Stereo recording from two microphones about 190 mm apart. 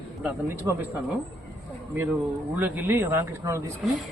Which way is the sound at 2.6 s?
10° right (ahead or behind).